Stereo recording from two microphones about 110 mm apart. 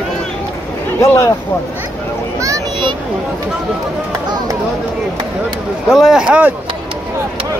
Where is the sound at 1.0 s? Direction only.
25° left (ahead or behind).